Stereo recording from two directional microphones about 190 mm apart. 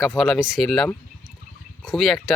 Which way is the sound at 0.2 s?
Centre (ahead or behind).